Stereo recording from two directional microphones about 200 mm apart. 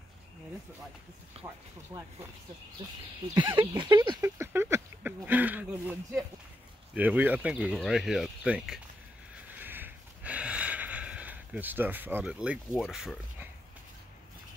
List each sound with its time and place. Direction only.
1.3 s speech: 30° right (ahead or behind)
1.9 s speech: 15° right (ahead or behind)
3.3 s speech: 25° right (ahead or behind)
3.8 s a sound: 20° right (ahead or behind)
7.0 s speech: 10° right (ahead or behind)
9.3 s a sound: 10° right (ahead or behind)